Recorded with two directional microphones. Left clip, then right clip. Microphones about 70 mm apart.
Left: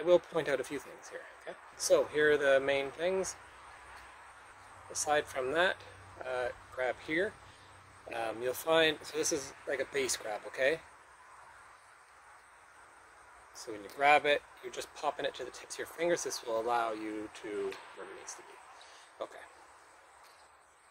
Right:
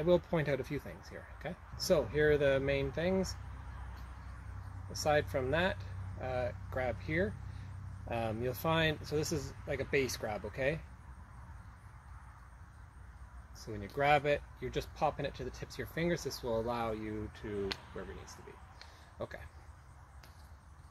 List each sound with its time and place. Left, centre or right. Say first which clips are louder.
0.0 s speech: left 3 dB; left
1.8 s speech: left 3 dB; left
4.9 s speech: even; left
8.2 s speech: left 2 dB; left
13.6 s speech: left 2 dB; left